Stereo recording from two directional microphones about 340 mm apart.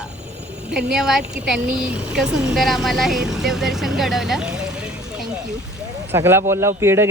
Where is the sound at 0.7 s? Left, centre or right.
Centre.